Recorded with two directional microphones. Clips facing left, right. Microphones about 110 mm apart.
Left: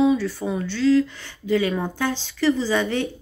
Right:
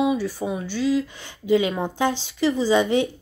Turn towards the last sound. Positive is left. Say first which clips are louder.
# right 3 dB
turn(degrees=-15)  # may be behind; listen again after turning